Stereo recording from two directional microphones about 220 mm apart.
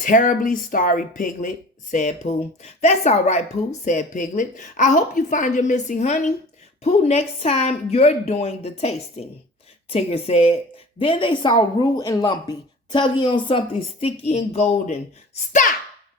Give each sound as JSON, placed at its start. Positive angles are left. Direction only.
{"t": 0.0, "sound": "a woman's voice", "side_deg": 35}